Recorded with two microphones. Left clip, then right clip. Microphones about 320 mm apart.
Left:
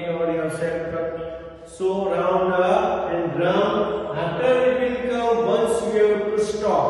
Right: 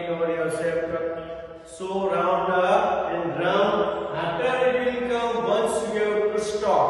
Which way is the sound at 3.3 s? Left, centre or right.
Centre.